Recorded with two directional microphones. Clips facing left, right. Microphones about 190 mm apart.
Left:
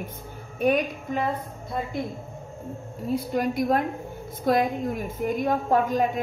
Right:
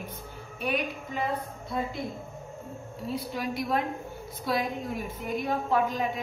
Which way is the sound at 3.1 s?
50° left (ahead or behind).